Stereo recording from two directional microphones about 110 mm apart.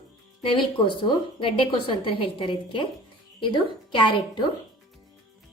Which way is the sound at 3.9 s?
45° left (ahead or behind).